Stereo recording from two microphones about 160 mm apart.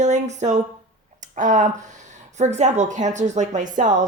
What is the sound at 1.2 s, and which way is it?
A woman's voice, 50° right (ahead or behind).